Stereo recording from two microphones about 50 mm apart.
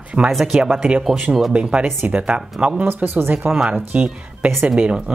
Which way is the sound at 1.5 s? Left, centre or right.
Right.